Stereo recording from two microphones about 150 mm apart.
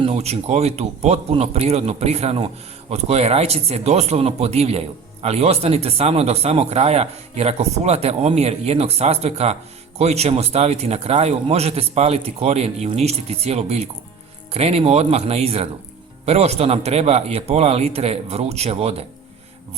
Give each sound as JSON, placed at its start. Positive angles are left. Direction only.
{"t": 0.0, "sound": "speech", "side_deg": -45}